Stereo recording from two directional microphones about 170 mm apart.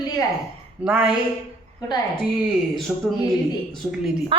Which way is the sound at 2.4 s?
Centre (ahead or behind).